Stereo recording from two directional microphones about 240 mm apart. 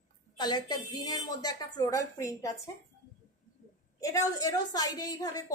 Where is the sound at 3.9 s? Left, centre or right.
Centre.